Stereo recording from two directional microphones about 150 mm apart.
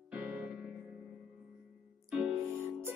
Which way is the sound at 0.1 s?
10° right (ahead or behind).